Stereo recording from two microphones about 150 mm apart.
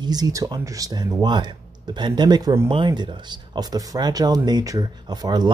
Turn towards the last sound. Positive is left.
turn(degrees=-25)  # may be behind; listen again after turning